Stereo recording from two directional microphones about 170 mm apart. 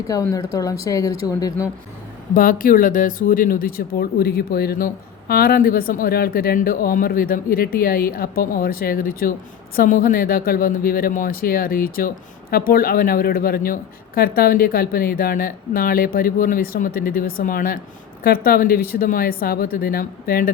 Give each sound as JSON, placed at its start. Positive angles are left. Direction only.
{"t": 0.1, "sound": "speech", "side_deg": 20}
{"t": 2.3, "sound": "speech", "side_deg": 55}